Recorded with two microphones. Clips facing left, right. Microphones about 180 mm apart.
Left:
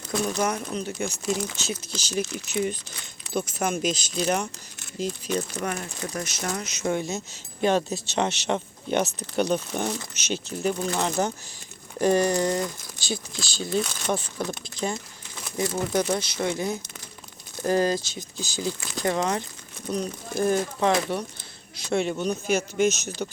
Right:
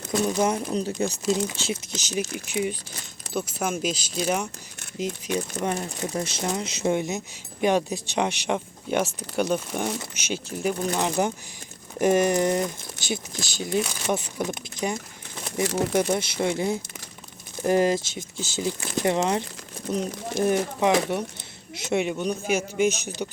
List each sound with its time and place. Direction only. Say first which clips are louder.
0.3 s speech: right 3 dB; 20° right (ahead or behind)
0.7 s speech: right 4 dB; 35° right (ahead or behind); by 5.6 s 15° right (ahead or behind)
5.6 s speech: right 3 dB; 25° right (ahead or behind)
22.0 s speech: even; 10° right (ahead or behind)